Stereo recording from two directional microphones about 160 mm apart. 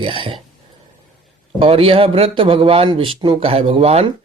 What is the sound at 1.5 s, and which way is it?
Speech, 35° right (ahead or behind).